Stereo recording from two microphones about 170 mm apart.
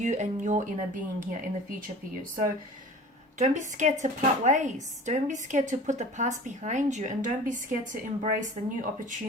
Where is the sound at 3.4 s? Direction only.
45° right (ahead or behind).